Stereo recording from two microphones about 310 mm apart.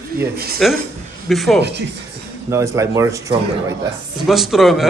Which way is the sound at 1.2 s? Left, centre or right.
Centre.